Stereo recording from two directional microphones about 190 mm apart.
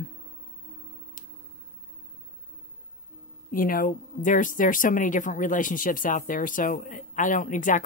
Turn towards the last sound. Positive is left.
turn(degrees=45)  # may be behind; listen again after turning